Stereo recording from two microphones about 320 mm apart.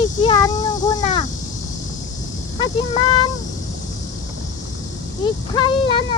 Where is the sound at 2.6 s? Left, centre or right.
Centre.